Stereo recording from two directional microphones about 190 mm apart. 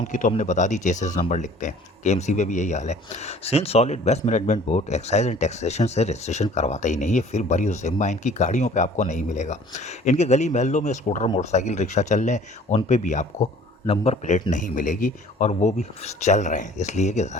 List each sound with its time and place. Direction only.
0.1 s a man's voice: 40° left (ahead or behind)